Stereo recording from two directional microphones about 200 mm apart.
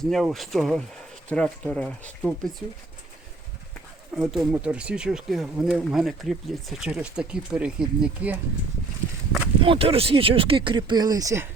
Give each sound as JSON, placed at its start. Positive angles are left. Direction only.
{"t": 0.0, "sound": "speech", "side_deg": 0}
{"t": 4.2, "sound": "speech", "side_deg": 0}
{"t": 9.6, "sound": "speech", "side_deg": -30}